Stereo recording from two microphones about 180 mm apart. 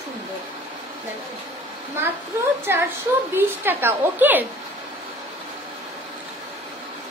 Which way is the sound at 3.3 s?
10° right (ahead or behind).